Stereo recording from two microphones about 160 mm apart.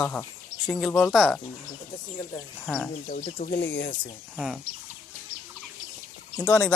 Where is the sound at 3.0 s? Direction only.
55° left (ahead or behind).